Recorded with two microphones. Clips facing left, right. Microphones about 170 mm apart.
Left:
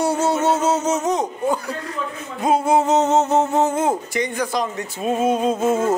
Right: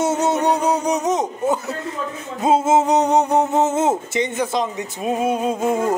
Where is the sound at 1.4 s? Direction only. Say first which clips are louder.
Right 1 dB; 20° right (ahead or behind).